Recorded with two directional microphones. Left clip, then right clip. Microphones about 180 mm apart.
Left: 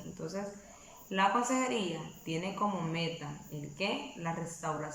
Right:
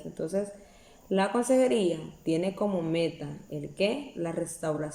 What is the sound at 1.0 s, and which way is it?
Speech, 20° right (ahead or behind).